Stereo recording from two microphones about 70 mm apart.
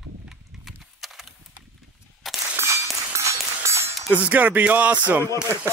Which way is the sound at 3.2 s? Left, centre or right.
Right.